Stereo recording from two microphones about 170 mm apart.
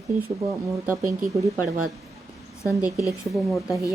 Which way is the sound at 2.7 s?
Centre (ahead or behind).